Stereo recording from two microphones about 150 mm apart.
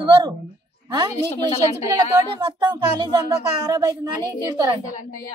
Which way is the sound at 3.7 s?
25° right (ahead or behind).